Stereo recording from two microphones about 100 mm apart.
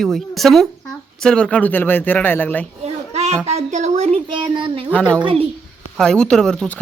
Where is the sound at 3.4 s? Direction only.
90° right.